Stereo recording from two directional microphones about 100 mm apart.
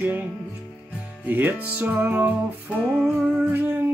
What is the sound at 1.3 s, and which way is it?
Music, 20° right (ahead or behind).